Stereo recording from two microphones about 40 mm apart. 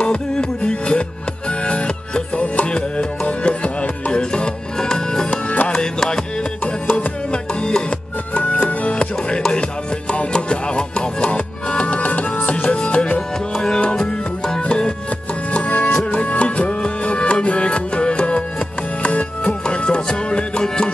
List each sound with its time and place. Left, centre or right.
0.0 s music: left
5.3 s music: left
5.7 s music: centre
6.6 s music: left
8.4 s music: left
8.9 s music: left
15.5 s music: left